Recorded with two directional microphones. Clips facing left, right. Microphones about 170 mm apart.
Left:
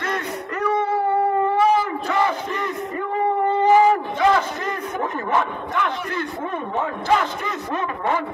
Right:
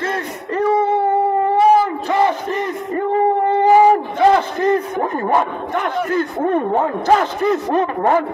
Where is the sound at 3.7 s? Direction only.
35° right (ahead or behind).